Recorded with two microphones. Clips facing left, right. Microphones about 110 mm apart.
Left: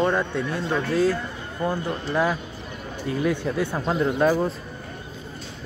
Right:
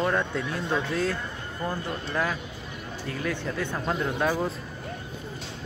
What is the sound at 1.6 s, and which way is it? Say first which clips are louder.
Speech: left 5 dB; 25° left (ahead or behind).